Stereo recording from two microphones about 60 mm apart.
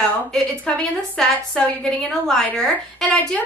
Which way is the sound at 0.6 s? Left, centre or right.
Centre.